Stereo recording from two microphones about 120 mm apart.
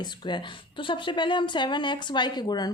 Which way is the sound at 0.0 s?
40° left (ahead or behind).